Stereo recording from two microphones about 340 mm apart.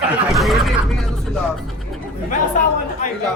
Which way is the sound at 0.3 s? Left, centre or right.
Centre.